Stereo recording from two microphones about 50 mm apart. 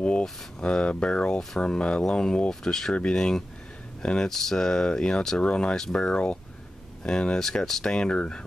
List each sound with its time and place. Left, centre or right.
0.2 s speech: centre